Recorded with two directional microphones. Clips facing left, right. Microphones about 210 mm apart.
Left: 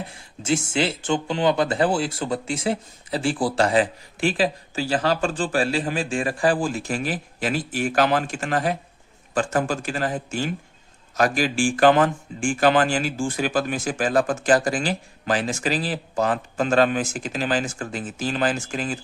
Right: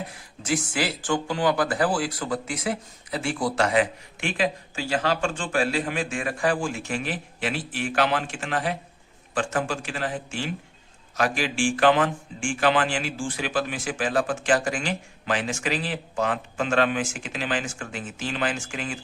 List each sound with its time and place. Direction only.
0.1 s speech: 25° left (ahead or behind)